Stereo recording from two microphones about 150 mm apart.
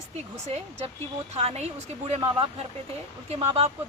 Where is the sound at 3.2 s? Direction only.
40° right (ahead or behind).